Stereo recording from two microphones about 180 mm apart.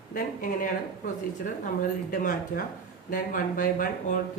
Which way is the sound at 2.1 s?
50° left (ahead or behind).